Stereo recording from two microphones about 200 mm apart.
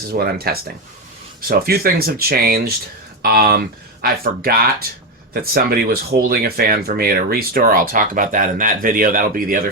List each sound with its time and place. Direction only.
0.2 s speech: 50° right (ahead or behind)